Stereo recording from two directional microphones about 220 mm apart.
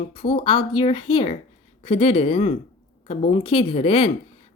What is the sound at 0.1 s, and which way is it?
Speech, 25° left (ahead or behind).